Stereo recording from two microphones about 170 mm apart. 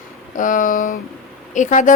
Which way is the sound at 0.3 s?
50° left (ahead or behind).